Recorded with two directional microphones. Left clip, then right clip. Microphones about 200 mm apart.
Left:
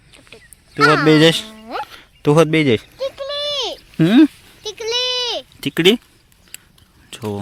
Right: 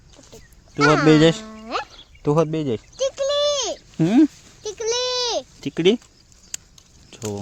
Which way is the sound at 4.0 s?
20° left (ahead or behind).